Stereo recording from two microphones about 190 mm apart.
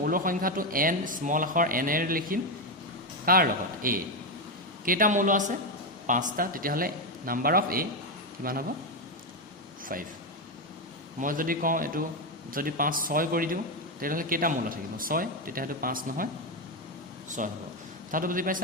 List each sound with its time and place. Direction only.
0.0 s speech: 50° right (ahead or behind)
9.9 s speech: 50° right (ahead or behind)
11.2 s speech: 45° right (ahead or behind)
17.4 s speech: 45° right (ahead or behind)